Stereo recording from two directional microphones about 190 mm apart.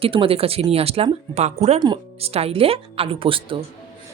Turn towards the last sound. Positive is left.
turn(degrees=-30)  # may be behind; listen again after turning